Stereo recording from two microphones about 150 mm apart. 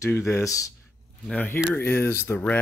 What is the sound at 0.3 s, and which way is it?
Speech, 20° left (ahead or behind).